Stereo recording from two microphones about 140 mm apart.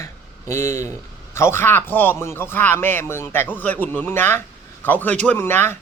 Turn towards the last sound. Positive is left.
turn(degrees=15)  # may be behind; listen again after turning